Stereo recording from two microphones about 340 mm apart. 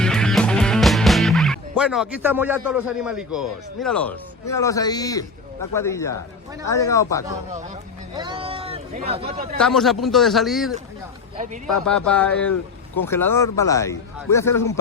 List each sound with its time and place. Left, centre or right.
0.0 s music: centre
2.6 s a man's voice: centre
8.1 s speech: centre
9.6 s a man's voice: centre
11.9 s a man's voice: centre